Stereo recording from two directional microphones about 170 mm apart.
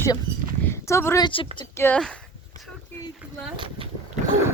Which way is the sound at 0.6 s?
15° left (ahead or behind).